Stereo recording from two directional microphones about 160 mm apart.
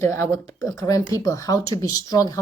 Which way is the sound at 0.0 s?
15° left (ahead or behind).